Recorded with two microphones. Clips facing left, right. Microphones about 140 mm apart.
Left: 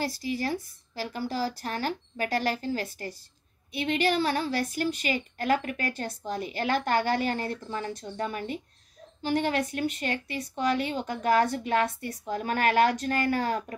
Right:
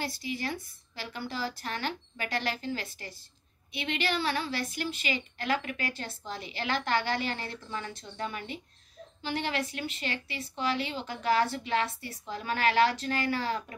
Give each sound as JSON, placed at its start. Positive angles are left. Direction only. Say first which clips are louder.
{"t": 0.0, "sound": "a woman's voice", "louder": "left 5 dB", "side_deg": 40}